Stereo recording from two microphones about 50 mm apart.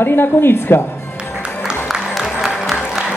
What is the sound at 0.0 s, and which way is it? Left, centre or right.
Speech, left.